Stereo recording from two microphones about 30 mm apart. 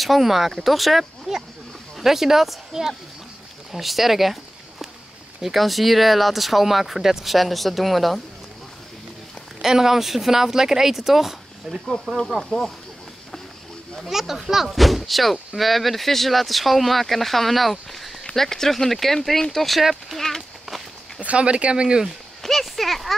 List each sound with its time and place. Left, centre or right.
0.0 s speech: centre
1.3 s speech: centre
3.7 s speech: centre
5.4 s speech: centre
7.2 s speech: centre
9.6 s speech: centre
14.0 s speech: centre
18.2 s speech: centre
20.2 s a sound: centre
21.2 s speech: right
22.4 s speech: centre